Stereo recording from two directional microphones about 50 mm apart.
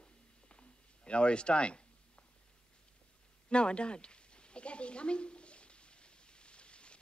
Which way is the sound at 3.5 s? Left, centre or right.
Centre.